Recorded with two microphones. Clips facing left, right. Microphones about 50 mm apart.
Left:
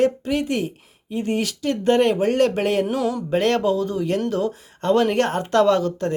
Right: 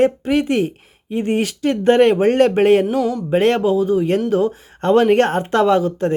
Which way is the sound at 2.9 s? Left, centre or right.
Centre.